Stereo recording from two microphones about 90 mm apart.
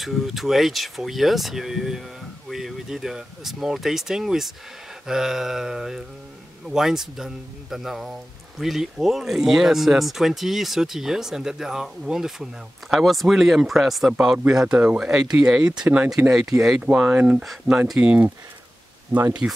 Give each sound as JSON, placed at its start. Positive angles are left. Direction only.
{"t": 0.0, "sound": "speech", "side_deg": 0}
{"t": 19.4, "sound": "speech", "side_deg": -15}